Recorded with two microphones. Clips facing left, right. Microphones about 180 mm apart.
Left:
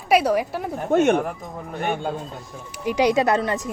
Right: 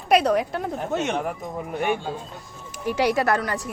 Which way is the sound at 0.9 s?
55° left (ahead or behind).